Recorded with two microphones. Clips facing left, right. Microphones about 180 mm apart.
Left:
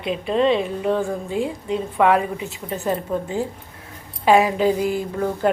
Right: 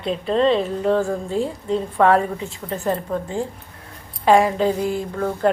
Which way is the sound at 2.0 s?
10° left (ahead or behind).